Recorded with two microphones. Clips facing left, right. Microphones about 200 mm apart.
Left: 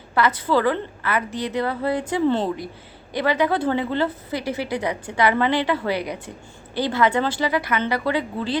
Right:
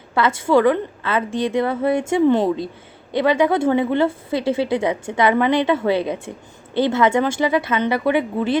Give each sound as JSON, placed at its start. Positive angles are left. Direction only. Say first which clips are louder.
{"t": 0.2, "sound": "a woman's voice", "louder": "right 4 dB", "side_deg": -25}